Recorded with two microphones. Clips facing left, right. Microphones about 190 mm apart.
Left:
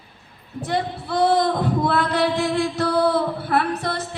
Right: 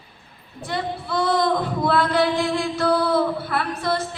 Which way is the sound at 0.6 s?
60° left (ahead or behind).